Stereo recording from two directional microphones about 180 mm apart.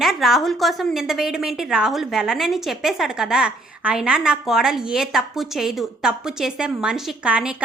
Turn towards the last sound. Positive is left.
turn(degrees=-5)  # may be behind; listen again after turning